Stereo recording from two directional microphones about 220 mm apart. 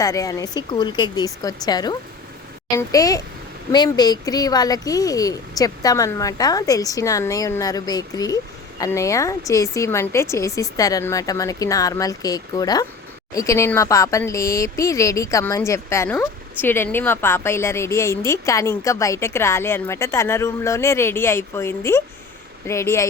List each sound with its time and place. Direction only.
0.0 s speech: 15° left (ahead or behind)